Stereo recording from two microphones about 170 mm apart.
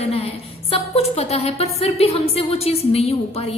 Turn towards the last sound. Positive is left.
turn(degrees=35)  # may be behind; listen again after turning